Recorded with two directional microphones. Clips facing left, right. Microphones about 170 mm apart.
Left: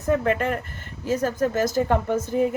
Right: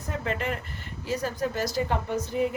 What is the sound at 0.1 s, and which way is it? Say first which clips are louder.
Speech: left 9 dB; 55° left (ahead or behind).